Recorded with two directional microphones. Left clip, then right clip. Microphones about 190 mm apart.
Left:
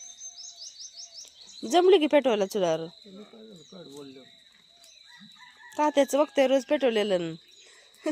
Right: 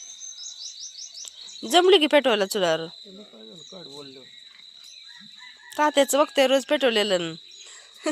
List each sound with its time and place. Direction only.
1.2 s speech: centre (ahead or behind)
3.7 s cricket: 40° right (ahead or behind)
5.7 s speech: centre (ahead or behind)